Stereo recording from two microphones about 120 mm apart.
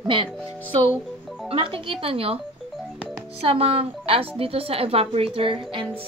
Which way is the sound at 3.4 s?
55° right (ahead or behind).